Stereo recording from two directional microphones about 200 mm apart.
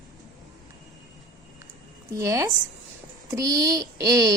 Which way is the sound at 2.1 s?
15° right (ahead or behind).